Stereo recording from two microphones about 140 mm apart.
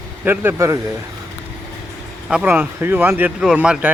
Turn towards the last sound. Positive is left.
turn(degrees=-5)  # may be behind; listen again after turning